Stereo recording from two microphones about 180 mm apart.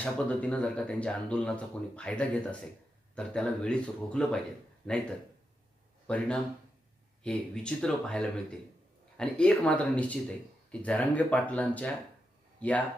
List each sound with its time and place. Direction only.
0.0 s speech: 5° left (ahead or behind)
6.1 s speech: 5° left (ahead or behind)